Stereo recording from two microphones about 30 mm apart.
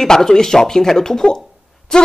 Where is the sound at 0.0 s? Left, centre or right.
Centre.